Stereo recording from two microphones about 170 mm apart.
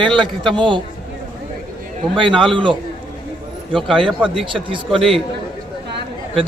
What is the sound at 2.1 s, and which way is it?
Speech, 30° right (ahead or behind).